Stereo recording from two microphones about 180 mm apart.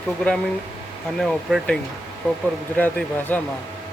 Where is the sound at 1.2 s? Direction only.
5° left (ahead or behind).